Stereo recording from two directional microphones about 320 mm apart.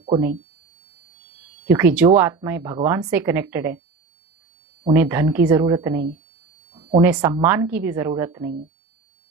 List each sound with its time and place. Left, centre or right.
1.6 s speech: centre
4.9 s speech: centre